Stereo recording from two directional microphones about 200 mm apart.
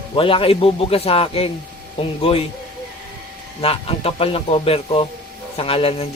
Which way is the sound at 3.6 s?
30° left (ahead or behind).